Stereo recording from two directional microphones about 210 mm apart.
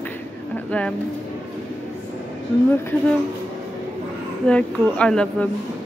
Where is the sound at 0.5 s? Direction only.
5° left (ahead or behind).